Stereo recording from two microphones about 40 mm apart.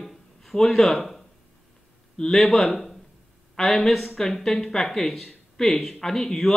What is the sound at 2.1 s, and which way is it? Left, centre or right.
Speech, centre.